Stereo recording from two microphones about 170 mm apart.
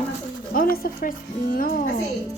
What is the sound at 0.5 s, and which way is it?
Speech, 55° left (ahead or behind).